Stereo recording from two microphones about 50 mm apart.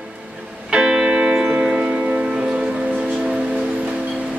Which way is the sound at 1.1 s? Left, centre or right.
Right.